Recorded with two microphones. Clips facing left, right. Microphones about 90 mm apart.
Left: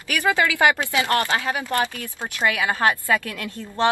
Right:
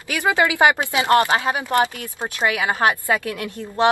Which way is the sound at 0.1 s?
20° right (ahead or behind).